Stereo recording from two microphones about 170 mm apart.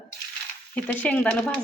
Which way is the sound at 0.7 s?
10° left (ahead or behind).